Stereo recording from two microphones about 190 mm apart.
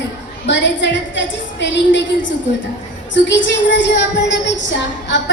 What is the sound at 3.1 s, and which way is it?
A woman's voice, 70° left (ahead or behind).